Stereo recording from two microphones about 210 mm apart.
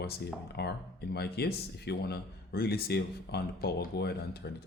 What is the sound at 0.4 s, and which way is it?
Speech, 50° left (ahead or behind).